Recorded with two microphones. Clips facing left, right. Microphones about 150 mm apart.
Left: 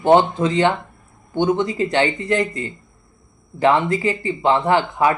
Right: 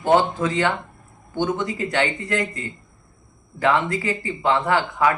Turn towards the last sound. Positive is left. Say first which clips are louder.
# left 3 dB
turn(degrees=25)  # may be behind; listen again after turning